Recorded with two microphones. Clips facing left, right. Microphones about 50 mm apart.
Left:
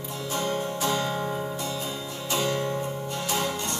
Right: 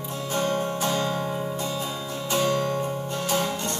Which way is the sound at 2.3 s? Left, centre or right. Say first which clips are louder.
Right 3 dB; right.